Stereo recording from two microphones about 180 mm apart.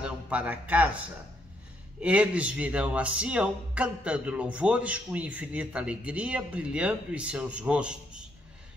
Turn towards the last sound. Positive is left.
turn(degrees=-5)  # may be behind; listen again after turning